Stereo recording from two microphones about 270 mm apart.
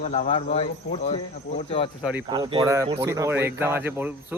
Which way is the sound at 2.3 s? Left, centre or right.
Centre.